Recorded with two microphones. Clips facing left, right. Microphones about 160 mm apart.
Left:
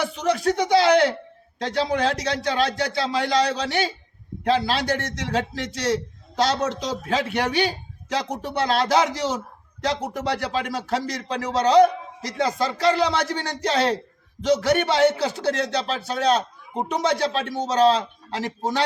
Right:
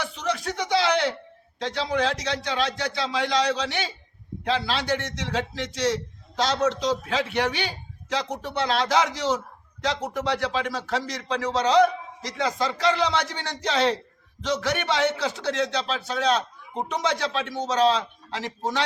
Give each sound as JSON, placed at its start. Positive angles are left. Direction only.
{"t": 0.0, "sound": "a man's voice", "side_deg": 40}